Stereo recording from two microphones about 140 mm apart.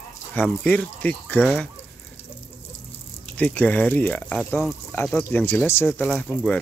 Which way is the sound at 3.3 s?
10° left (ahead or behind).